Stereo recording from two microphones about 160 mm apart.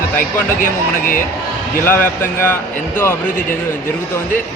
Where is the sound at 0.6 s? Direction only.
60° left (ahead or behind).